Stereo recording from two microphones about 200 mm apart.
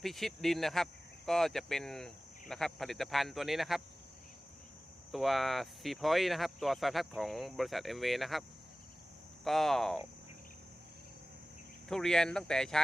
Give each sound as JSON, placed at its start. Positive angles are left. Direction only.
{"t": 0.0, "sound": "speech", "side_deg": 0}
{"t": 5.1, "sound": "speech", "side_deg": 0}
{"t": 11.9, "sound": "speech", "side_deg": 0}